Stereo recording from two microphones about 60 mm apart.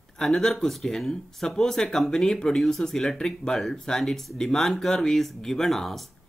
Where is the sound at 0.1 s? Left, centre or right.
Centre.